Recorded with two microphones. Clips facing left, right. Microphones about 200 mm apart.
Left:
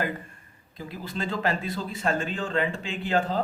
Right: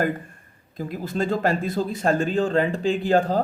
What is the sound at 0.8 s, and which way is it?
Speech, 45° right (ahead or behind).